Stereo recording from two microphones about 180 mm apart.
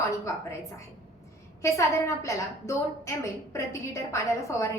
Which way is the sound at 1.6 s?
15° left (ahead or behind).